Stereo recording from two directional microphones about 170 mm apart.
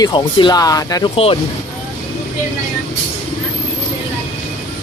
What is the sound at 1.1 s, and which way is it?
Speech, 35° left (ahead or behind).